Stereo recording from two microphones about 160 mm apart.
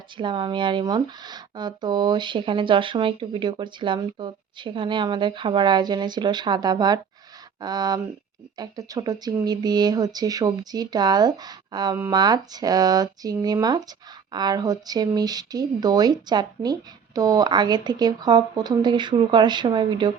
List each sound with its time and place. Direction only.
0.2 s speech: 30° right (ahead or behind)